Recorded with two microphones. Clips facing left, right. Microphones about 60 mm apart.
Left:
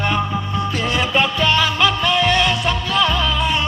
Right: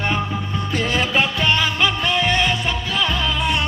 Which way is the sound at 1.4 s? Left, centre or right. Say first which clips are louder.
Left 2 dB; centre.